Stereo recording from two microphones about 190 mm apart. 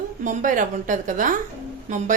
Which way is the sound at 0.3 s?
45° right (ahead or behind).